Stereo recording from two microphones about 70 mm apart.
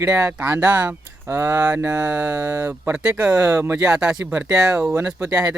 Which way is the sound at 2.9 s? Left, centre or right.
Centre.